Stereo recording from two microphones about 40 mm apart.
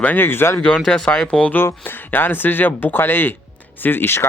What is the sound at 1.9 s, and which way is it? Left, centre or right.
Speech, left.